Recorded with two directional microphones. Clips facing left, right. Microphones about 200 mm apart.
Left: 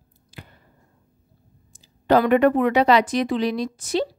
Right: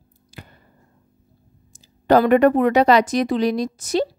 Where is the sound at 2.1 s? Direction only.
45° right (ahead or behind).